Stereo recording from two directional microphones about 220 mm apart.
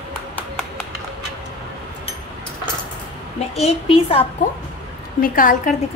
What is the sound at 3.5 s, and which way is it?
Speech, 25° left (ahead or behind).